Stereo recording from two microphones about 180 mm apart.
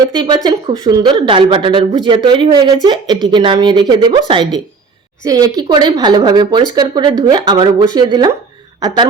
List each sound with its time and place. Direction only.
0.1 s speech: 25° right (ahead or behind)